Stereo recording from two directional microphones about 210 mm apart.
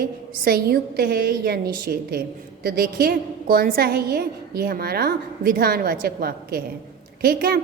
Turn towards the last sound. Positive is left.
turn(degrees=-45)  # may be behind; listen again after turning